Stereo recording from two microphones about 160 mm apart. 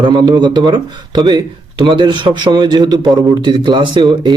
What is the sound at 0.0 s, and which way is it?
A man's voice, 25° right (ahead or behind).